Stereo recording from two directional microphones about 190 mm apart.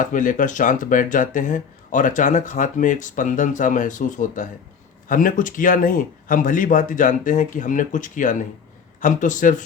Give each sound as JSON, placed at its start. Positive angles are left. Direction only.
{"t": 0.0, "sound": "speech", "side_deg": 45}